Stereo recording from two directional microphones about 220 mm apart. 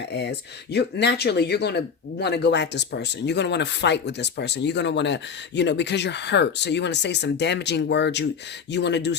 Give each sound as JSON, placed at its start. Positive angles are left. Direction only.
{"t": 0.0, "sound": "speech", "side_deg": 50}